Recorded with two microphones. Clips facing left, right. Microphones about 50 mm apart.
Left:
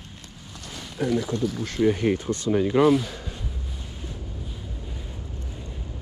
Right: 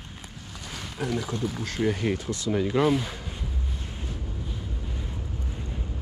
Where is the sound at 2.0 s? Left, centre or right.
Left.